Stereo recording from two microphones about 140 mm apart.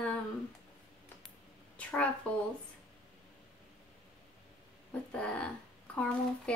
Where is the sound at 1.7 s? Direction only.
10° left (ahead or behind).